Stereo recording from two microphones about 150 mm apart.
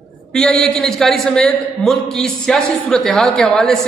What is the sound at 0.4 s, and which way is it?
A man's voice, 5° left (ahead or behind).